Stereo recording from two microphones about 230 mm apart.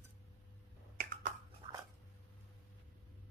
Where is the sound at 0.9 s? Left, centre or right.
Right.